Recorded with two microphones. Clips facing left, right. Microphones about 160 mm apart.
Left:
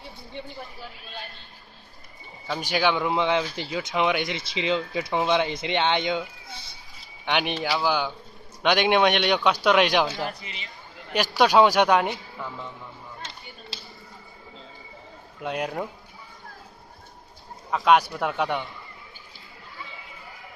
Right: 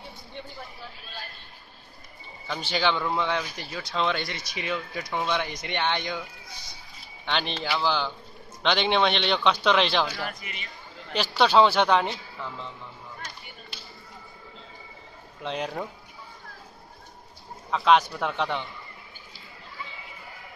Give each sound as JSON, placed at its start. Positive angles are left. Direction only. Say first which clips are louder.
{"t": 2.4, "sound": "a man's voice", "louder": "left 2 dB", "side_deg": 10}
{"t": 7.2, "sound": "a man's voice", "louder": "left 3 dB", "side_deg": 15}
{"t": 15.4, "sound": "a man's voice", "louder": "left 2 dB", "side_deg": 10}
{"t": 17.6, "sound": "a man's voice", "louder": "left 1 dB", "side_deg": 10}